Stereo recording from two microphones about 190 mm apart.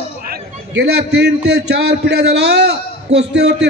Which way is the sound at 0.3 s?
60° right (ahead or behind).